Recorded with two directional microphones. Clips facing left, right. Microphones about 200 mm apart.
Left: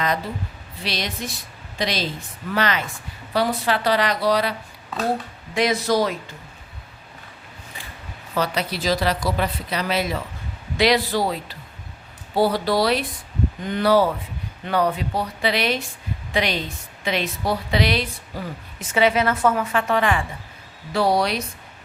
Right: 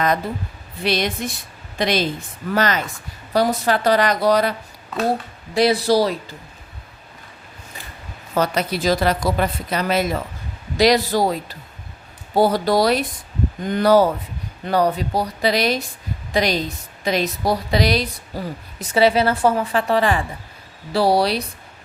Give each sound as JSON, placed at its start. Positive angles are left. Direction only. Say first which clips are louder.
{"t": 0.8, "sound": "speech", "louder": "right 7 dB", "side_deg": -55}
{"t": 2.5, "sound": "speech", "louder": "right 3 dB", "side_deg": -45}
{"t": 5.5, "sound": "a woman's voice", "louder": "right 4 dB", "side_deg": -35}
{"t": 8.4, "sound": "a woman's voice", "louder": "right 4 dB", "side_deg": -50}